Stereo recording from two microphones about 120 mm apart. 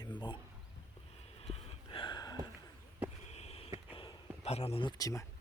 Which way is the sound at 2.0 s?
35° left (ahead or behind).